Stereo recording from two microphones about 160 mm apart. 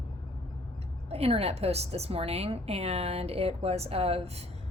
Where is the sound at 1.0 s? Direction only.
40° right (ahead or behind).